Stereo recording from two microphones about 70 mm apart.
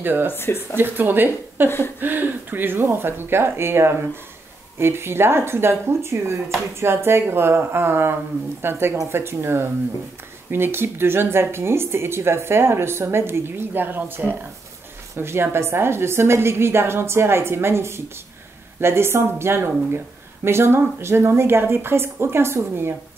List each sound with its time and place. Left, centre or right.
0.0 s speech: right
0.3 s speech: left
0.7 s speech: right